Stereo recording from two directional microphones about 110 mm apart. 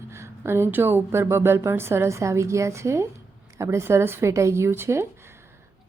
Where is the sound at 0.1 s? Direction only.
25° right (ahead or behind).